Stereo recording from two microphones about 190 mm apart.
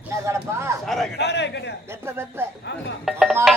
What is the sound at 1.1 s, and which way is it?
Speech, 65° left (ahead or behind).